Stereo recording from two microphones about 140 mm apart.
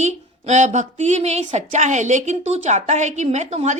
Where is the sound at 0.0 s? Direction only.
55° right (ahead or behind).